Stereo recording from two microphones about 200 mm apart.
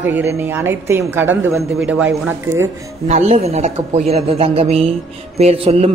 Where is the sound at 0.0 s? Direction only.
10° right (ahead or behind).